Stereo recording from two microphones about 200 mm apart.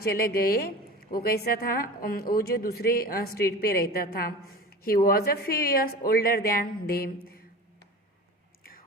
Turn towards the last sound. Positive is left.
turn(degrees=50)  # may be behind; listen again after turning